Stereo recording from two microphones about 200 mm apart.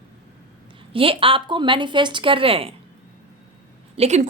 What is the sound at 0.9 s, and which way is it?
Speech, 25° right (ahead or behind).